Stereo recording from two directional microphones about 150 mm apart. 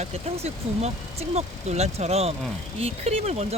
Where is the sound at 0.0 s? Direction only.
45° right (ahead or behind).